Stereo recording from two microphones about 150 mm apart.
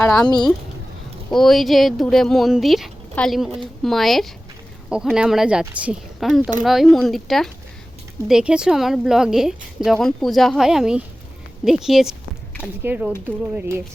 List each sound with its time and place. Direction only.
0.3 s speech: 30° left (ahead or behind)
1.3 s speech: centre (ahead or behind); by 13.8 s 15° right (ahead or behind)